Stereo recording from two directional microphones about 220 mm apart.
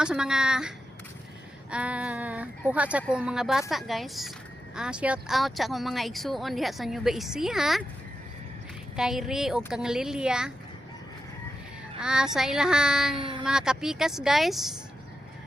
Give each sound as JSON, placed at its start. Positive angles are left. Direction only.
{"t": 0.0, "sound": "speech", "side_deg": -5}
{"t": 1.7, "sound": "speech", "side_deg": -5}
{"t": 9.0, "sound": "speech", "side_deg": 0}
{"t": 11.9, "sound": "speech", "side_deg": -5}
{"t": 13.1, "sound": "speech", "side_deg": -20}
{"t": 13.4, "sound": "speech", "side_deg": -5}